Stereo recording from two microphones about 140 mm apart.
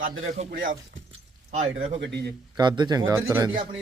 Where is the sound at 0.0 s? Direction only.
70° right (ahead or behind).